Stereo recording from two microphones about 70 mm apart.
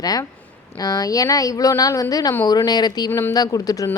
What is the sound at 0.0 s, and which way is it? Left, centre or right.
Speech, left.